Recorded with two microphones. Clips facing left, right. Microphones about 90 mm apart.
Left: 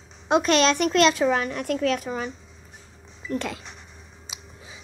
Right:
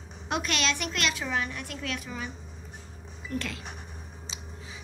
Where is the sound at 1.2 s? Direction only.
60° left (ahead or behind).